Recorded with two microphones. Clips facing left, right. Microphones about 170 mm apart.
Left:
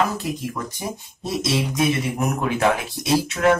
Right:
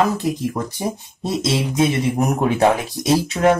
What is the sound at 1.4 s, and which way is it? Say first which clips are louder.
Speech: right 3 dB; 30° right (ahead or behind).